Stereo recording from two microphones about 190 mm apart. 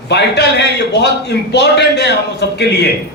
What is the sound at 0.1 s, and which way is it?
A man's voice, 65° left (ahead or behind).